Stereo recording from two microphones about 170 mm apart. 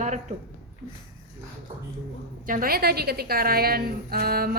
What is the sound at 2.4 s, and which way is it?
A woman's voice, 55° right (ahead or behind).